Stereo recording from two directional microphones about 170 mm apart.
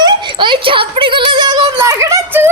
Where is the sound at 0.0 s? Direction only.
25° right (ahead or behind).